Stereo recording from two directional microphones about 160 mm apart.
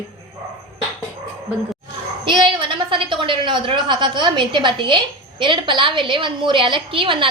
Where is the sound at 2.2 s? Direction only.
30° right (ahead or behind).